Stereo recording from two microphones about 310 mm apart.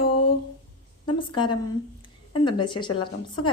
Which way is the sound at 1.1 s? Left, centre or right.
Centre.